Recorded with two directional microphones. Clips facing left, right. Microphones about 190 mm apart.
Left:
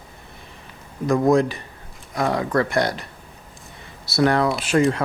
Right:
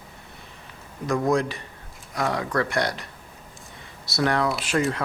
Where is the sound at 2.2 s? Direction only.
35° left (ahead or behind).